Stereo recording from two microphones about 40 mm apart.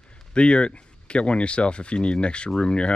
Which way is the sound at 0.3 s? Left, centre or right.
Left.